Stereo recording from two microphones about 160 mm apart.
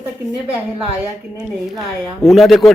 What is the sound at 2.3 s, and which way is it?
Speech, centre (ahead or behind).